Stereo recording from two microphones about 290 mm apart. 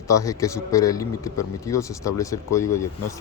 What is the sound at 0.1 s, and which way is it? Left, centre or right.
Speech, centre.